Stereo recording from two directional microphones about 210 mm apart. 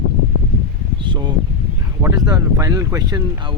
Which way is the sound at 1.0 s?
20° right (ahead or behind).